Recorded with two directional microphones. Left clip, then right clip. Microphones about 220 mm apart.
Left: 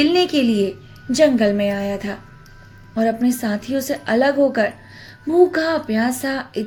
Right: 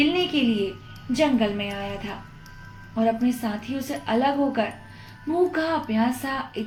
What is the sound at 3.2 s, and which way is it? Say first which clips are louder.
Speech: left 5 dB; 55° left (ahead or behind).